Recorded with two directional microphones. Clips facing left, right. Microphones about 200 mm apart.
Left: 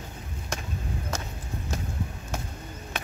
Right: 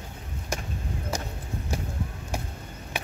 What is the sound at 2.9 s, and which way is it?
Chop, 10° right (ahead or behind).